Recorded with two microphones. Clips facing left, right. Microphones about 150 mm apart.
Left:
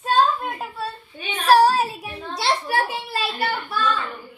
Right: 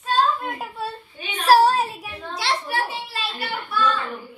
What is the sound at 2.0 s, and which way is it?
Speech, 30° left (ahead or behind).